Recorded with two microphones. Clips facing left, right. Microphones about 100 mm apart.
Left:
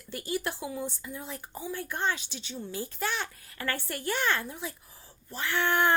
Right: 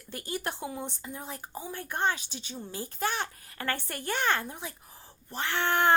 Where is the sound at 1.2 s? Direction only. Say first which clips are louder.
Even; 45° right (ahead or behind).